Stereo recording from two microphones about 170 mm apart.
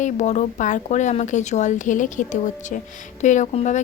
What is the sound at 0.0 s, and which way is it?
A woman's voice, 45° left (ahead or behind).